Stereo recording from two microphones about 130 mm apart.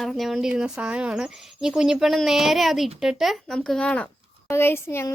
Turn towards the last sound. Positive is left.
turn(degrees=20)  # may be behind; listen again after turning